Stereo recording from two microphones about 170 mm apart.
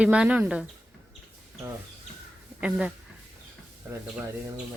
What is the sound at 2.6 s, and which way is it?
Speech, 5° right (ahead or behind).